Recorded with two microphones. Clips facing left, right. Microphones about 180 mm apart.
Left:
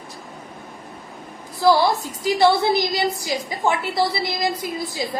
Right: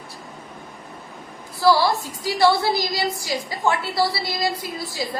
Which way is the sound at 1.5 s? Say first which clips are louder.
Left 1 dB; 20° left (ahead or behind).